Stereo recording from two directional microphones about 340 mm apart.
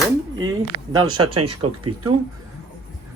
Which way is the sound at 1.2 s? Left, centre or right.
Right.